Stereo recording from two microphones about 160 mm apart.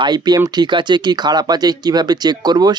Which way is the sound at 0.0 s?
25° right (ahead or behind).